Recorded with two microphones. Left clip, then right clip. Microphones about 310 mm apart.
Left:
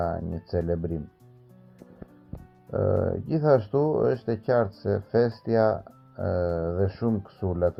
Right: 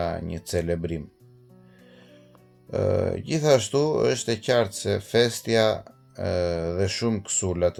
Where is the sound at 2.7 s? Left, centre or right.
Right.